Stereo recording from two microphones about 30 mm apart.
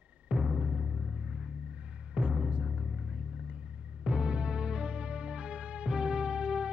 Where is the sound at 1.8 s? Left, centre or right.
Right.